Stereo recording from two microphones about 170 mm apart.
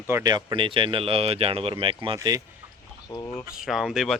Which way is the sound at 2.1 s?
20° right (ahead or behind).